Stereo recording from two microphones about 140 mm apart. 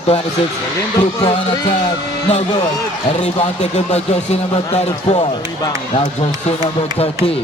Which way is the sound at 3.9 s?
50° left (ahead or behind).